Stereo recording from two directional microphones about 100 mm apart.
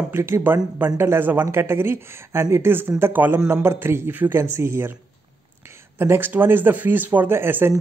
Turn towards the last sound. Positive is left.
turn(degrees=-25)  # may be behind; listen again after turning